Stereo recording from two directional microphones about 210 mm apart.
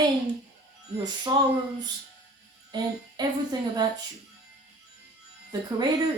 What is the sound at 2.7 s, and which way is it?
Speech, 20° right (ahead or behind).